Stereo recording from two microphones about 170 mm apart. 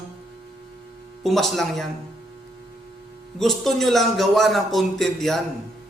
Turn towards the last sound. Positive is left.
turn(degrees=0)  # may be behind; listen again after turning